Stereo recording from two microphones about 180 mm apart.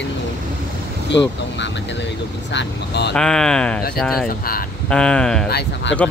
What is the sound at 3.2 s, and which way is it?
Speech, 5° left (ahead or behind).